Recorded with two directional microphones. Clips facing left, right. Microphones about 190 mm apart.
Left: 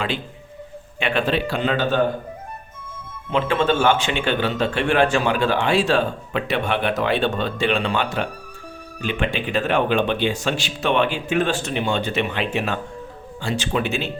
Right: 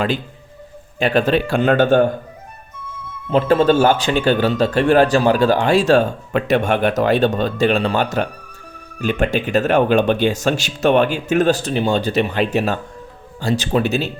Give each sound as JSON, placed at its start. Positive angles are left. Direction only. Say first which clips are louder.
{"t": 0.9, "sound": "speech", "louder": "right 5 dB", "side_deg": -40}
{"t": 3.2, "sound": "a man's voice", "louder": "right 6 dB", "side_deg": -40}